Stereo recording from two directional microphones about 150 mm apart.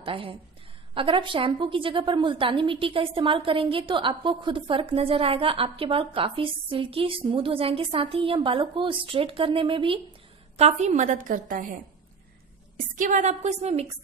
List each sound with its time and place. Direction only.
0.0 s a woman's voice: 35° right (ahead or behind)
10.6 s a woman's voice: 50° right (ahead or behind)